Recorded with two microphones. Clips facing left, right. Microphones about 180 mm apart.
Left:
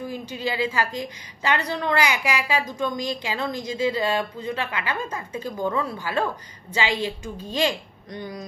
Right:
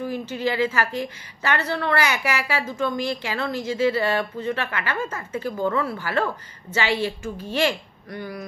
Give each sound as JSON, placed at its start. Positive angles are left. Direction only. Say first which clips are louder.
{"t": 0.0, "sound": "a woman's voice", "louder": "right 4 dB", "side_deg": 15}